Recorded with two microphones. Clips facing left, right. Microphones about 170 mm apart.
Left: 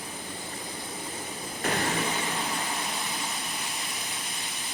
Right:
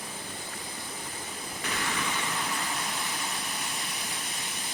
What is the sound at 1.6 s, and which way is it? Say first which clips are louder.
Waterfall: left 7 dB; 50° left (ahead or behind).